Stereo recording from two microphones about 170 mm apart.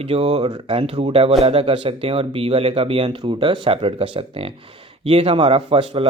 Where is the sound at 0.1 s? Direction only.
30° right (ahead or behind).